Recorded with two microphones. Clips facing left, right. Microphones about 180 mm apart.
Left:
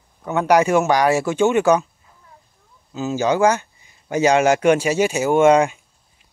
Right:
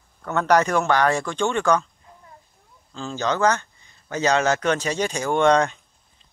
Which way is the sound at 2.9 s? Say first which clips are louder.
Left 6 dB; 10° left (ahead or behind).